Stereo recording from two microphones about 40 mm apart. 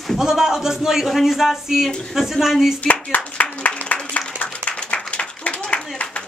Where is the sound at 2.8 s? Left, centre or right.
Left.